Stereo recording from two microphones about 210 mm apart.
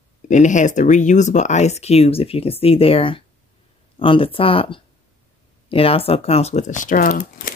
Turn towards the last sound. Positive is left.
turn(degrees=40)  # may be behind; listen again after turning